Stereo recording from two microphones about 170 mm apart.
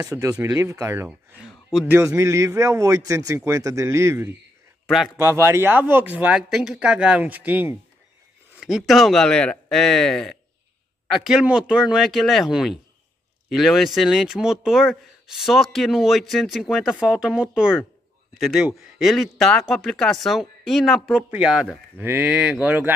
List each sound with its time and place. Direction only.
0.0 s a man's voice: 20° right (ahead or behind)
1.4 s speech: centre (ahead or behind)
2.0 s a man's voice: 20° right (ahead or behind)
4.8 s a man's voice: centre (ahead or behind)
5.1 s speech: 15° right (ahead or behind)